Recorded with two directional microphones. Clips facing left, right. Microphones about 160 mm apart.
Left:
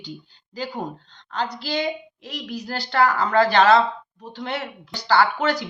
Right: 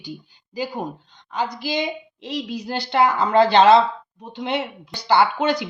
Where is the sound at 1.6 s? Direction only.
15° right (ahead or behind).